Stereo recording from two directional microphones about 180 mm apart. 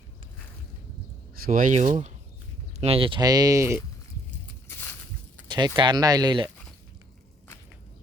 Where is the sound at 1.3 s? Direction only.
50° right (ahead or behind).